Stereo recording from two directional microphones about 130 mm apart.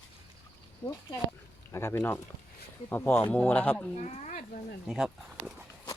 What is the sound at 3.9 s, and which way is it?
Speech, 65° left (ahead or behind).